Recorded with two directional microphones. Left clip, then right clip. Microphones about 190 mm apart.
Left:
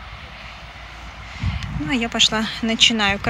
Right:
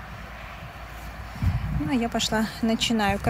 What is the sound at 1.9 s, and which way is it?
Speech, 5° left (ahead or behind).